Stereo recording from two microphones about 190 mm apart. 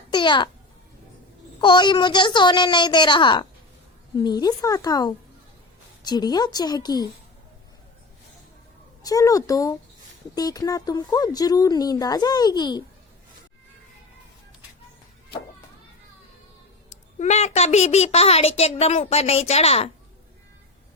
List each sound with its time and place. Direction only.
0.1 s babbling: 25° left (ahead or behind)
1.6 s speech: 25° left (ahead or behind)
9.0 s a child's voice: 20° left (ahead or behind)
17.2 s a child's voice: 35° left (ahead or behind)